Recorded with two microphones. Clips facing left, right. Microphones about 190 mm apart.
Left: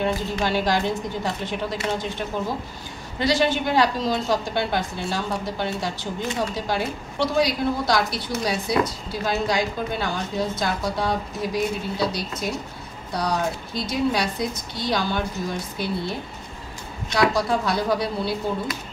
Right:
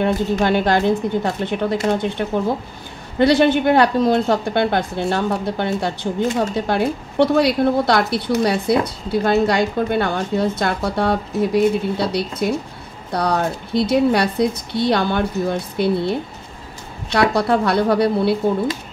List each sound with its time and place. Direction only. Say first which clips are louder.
0.0 s a woman's voice: right 6 dB; 60° right (ahead or behind)
17.3 s a woman's voice: right 6 dB; 60° right (ahead or behind)